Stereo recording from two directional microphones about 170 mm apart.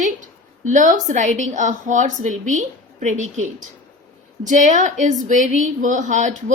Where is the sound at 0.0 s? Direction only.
45° right (ahead or behind).